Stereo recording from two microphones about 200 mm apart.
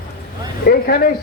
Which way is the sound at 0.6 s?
45° left (ahead or behind).